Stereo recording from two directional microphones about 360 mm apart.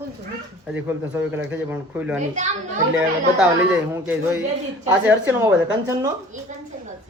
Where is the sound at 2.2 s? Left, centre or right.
Centre.